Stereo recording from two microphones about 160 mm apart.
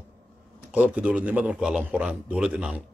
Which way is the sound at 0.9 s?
10° right (ahead or behind).